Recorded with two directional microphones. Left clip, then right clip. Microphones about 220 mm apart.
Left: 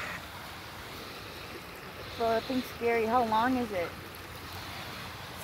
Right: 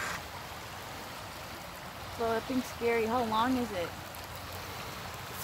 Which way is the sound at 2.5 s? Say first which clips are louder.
Left 1 dB; 5° right (ahead or behind).